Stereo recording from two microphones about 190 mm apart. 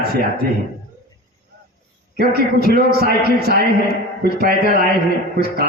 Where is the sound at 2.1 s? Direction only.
55° right (ahead or behind).